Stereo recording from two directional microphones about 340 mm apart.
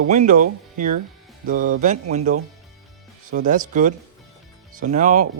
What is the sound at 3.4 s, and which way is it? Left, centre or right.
Speech, right.